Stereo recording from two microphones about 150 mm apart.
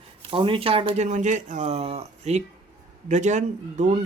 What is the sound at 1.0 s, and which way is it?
Speech, 55° right (ahead or behind).